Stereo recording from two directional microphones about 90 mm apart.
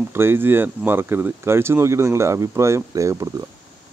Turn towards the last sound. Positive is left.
turn(degrees=-35)  # may be behind; listen again after turning